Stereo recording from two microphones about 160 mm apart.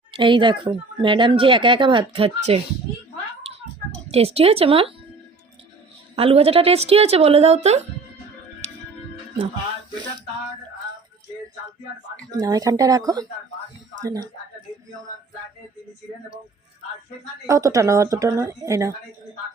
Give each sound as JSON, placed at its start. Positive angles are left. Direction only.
{"t": 0.2, "sound": "speech", "side_deg": -30}
{"t": 4.1, "sound": "speech", "side_deg": -40}
{"t": 6.1, "sound": "speech", "side_deg": -35}
{"t": 8.6, "sound": "music", "side_deg": -45}
{"t": 12.3, "sound": "speech", "side_deg": -25}
{"t": 17.5, "sound": "speech", "side_deg": -20}